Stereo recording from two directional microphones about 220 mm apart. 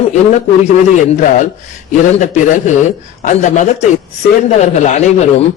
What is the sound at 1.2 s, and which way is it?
A man's voice, 35° left (ahead or behind).